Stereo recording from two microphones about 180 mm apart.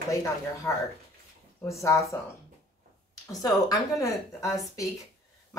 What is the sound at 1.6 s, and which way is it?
Speech, 15° left (ahead or behind).